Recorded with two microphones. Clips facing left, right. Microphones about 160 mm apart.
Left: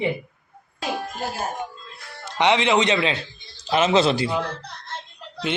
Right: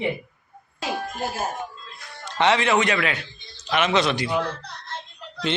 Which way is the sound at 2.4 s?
20° left (ahead or behind).